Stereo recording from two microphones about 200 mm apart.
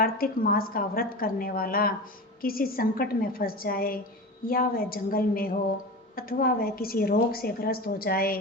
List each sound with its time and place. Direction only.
0.0 s a woman's voice: 45° left (ahead or behind)